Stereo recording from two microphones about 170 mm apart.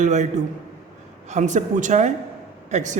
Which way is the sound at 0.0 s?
45° right (ahead or behind).